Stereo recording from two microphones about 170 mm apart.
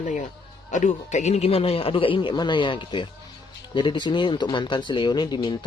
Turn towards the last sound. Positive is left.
turn(degrees=25)  # may be behind; listen again after turning